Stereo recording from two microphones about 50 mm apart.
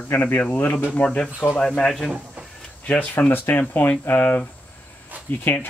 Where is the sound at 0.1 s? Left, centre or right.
Left.